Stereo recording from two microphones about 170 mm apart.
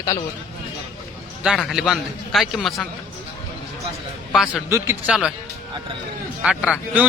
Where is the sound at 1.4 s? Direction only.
Centre (ahead or behind).